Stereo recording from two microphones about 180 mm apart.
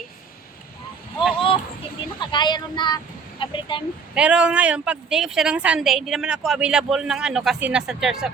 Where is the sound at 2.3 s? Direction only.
25° left (ahead or behind).